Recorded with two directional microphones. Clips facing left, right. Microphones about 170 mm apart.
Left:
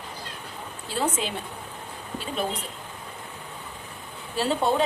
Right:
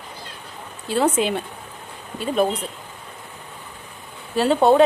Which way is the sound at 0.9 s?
65° right (ahead or behind).